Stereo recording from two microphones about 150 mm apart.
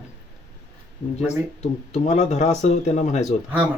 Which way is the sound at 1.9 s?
50° left (ahead or behind).